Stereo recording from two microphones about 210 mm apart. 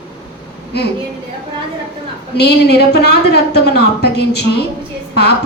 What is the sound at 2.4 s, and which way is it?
A woman's voice, 50° left (ahead or behind).